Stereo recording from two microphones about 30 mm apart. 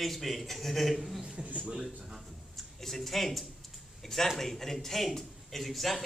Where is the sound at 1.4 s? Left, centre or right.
Right.